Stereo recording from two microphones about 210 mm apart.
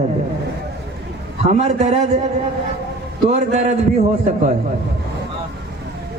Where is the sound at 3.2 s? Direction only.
35° right (ahead or behind).